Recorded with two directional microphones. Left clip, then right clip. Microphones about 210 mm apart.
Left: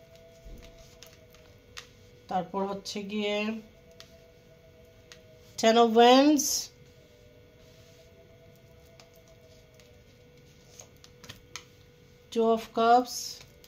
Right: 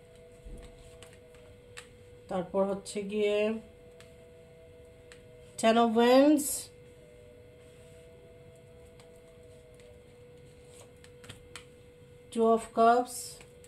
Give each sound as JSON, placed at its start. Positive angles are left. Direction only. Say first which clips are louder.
{"t": 2.2, "sound": "speech", "louder": "right 1 dB", "side_deg": 40}
{"t": 5.6, "sound": "speech", "louder": "left 5 dB", "side_deg": 40}
{"t": 12.3, "sound": "speech", "louder": "even", "side_deg": 35}